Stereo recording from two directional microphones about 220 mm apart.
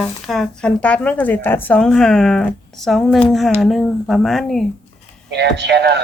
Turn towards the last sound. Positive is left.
turn(degrees=-50)  # may be behind; listen again after turning